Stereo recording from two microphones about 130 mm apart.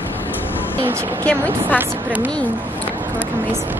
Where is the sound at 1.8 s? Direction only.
10° right (ahead or behind).